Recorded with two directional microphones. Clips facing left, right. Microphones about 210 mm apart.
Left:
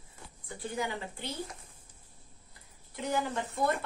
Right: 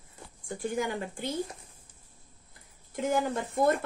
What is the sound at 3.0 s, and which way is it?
Speech, 45° right (ahead or behind).